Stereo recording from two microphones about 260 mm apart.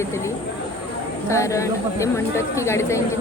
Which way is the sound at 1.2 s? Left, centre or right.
Centre.